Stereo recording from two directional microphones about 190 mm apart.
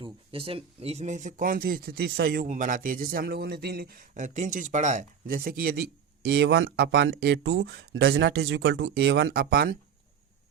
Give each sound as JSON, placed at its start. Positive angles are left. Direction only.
{"t": 0.0, "sound": "speech", "side_deg": -30}
{"t": 2.5, "sound": "speech", "side_deg": -45}
{"t": 6.2, "sound": "speech", "side_deg": -65}